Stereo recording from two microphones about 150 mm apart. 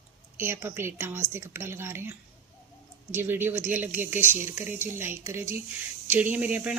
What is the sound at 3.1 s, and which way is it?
Speech, 15° right (ahead or behind).